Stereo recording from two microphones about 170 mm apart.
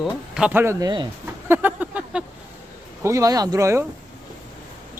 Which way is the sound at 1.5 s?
10° right (ahead or behind).